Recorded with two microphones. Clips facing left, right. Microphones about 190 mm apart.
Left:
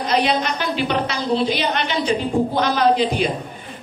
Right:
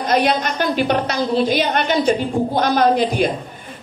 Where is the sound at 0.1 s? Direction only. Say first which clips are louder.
Right 2 dB; 45° right (ahead or behind).